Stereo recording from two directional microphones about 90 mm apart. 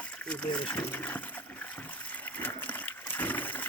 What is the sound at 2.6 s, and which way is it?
Water, 20° left (ahead or behind).